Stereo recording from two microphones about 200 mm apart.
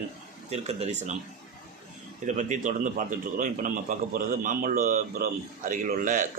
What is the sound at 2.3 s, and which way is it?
A man's voice, 40° right (ahead or behind).